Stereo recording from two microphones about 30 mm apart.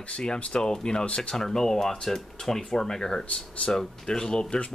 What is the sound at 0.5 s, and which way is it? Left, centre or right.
Speech, left.